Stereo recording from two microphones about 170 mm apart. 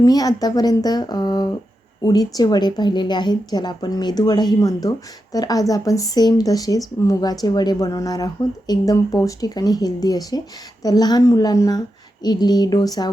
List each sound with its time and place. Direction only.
0.0 s a woman's voice: 20° left (ahead or behind)